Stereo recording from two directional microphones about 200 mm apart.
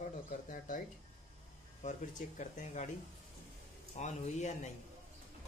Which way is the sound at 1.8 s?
40° left (ahead or behind).